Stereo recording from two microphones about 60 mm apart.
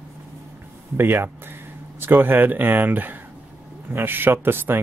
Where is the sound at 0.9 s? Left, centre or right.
Right.